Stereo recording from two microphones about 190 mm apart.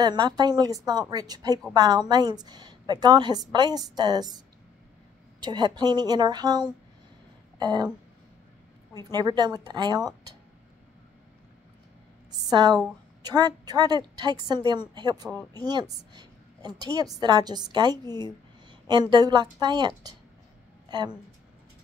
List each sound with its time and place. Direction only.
0.0 s a woman's voice: 20° right (ahead or behind)
5.4 s a woman's voice: 20° right (ahead or behind)
8.9 s a woman's voice: 20° right (ahead or behind)
12.4 s a woman's voice: 20° right (ahead or behind)